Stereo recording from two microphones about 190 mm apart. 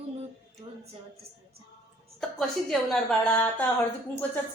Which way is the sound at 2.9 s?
5° left (ahead or behind).